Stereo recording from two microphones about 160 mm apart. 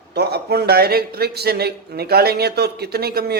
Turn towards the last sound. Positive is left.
turn(degrees=-80)